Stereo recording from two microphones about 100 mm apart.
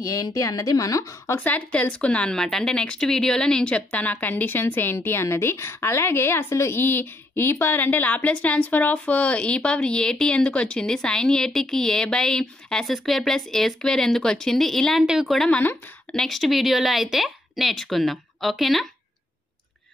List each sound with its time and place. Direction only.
0.0 s speech: 35° left (ahead or behind)
1.5 s speech: 10° left (ahead or behind)